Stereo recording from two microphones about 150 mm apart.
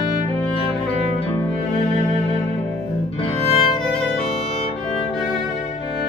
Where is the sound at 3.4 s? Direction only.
40° left (ahead or behind).